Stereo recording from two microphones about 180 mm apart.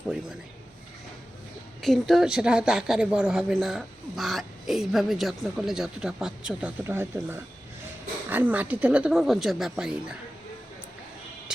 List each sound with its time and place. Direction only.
1.8 s a woman's voice: centre (ahead or behind)